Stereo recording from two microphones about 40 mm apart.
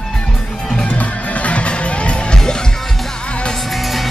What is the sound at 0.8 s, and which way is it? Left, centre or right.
Music, left.